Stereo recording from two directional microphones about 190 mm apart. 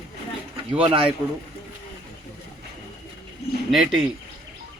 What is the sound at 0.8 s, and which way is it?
Speech, 25° right (ahead or behind).